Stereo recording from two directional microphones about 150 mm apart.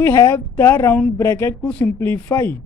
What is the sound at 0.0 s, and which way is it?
A man's voice, 15° left (ahead or behind).